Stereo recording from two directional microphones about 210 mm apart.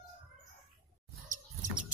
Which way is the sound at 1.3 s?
40° right (ahead or behind).